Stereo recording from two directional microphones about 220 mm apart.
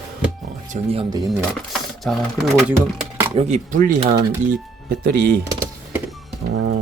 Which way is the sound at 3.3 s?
30° right (ahead or behind).